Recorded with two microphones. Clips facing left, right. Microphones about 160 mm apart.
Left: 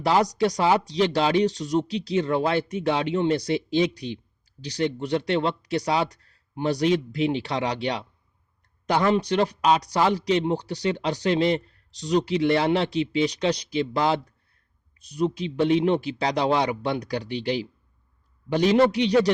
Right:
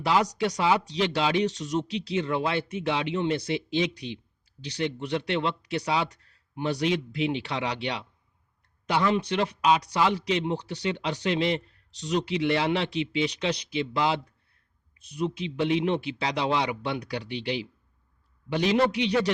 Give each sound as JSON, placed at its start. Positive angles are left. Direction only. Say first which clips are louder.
{"t": 0.0, "sound": "speech", "louder": "left 3 dB", "side_deg": 40}